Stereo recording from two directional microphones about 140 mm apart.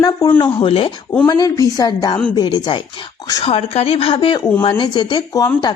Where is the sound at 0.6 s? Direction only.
40° left (ahead or behind).